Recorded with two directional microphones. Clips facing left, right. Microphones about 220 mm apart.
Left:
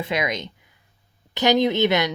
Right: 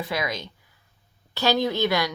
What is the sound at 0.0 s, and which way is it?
A woman's voice, 20° left (ahead or behind).